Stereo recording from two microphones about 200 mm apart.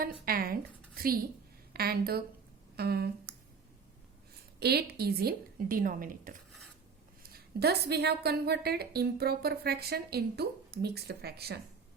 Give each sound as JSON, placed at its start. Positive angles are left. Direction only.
{"t": 0.0, "sound": "a woman's voice", "side_deg": -45}
{"t": 4.6, "sound": "a woman's voice", "side_deg": -50}